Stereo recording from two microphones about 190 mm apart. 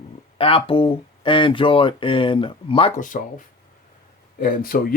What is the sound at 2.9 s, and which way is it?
Speech, 45° left (ahead or behind).